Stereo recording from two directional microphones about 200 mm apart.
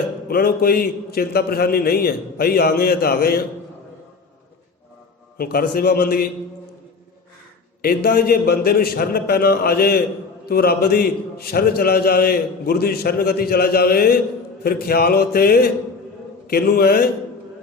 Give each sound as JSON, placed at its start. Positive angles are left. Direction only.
{"t": 0.3, "sound": "a man's voice", "side_deg": 50}
{"t": 5.4, "sound": "a man's voice", "side_deg": 50}
{"t": 7.8, "sound": "a man's voice", "side_deg": 50}